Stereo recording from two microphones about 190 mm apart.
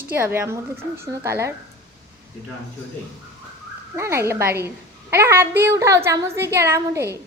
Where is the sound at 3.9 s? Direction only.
15° right (ahead or behind).